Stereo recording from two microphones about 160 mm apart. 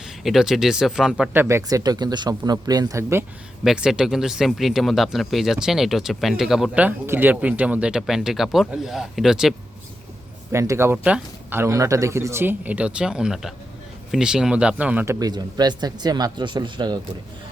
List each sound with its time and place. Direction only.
0.2 s speech: centre (ahead or behind)
3.6 s speech: 5° right (ahead or behind)
10.5 s a man's voice: 15° right (ahead or behind)